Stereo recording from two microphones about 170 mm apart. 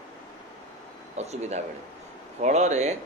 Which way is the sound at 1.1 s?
40° right (ahead or behind).